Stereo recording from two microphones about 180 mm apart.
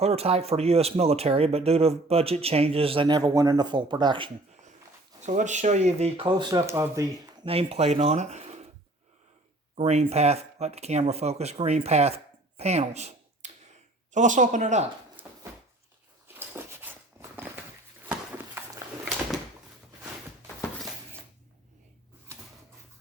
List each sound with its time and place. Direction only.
0.0 s speech: 35° right (ahead or behind)
5.2 s speech: 40° right (ahead or behind); by 7.0 s 15° right (ahead or behind)
7.4 s speech: 35° right (ahead or behind)
9.7 s speech: 35° right (ahead or behind)
15.2 s a sound: 10° right (ahead or behind)